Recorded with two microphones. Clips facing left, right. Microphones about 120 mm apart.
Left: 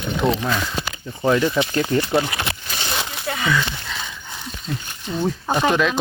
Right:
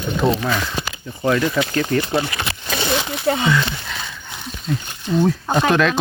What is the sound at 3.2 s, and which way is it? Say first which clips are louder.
Speech: right 7 dB; 30° right (ahead or behind).